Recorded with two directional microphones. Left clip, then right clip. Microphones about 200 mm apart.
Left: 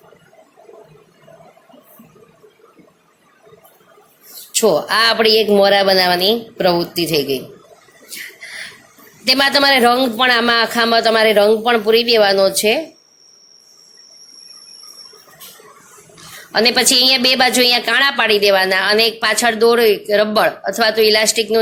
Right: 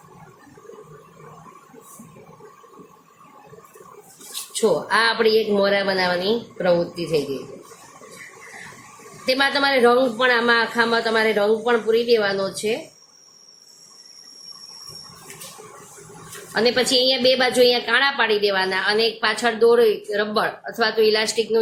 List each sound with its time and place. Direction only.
4.9 s a woman's voice: 40° left (ahead or behind)
9.2 s a woman's voice: 40° left (ahead or behind)
16.6 s a woman's voice: 35° left (ahead or behind)